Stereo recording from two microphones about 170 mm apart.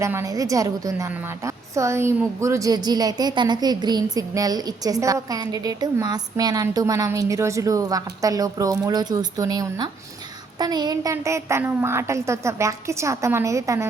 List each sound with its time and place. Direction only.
0.0 s a woman's voice: 15° right (ahead or behind)